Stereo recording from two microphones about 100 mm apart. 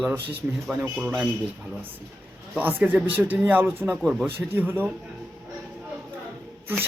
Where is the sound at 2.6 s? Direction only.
15° right (ahead or behind).